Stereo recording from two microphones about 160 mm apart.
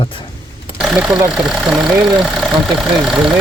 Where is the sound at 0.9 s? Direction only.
10° right (ahead or behind).